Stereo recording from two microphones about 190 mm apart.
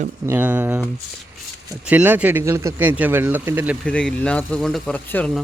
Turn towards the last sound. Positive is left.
turn(degrees=5)  # may be behind; listen again after turning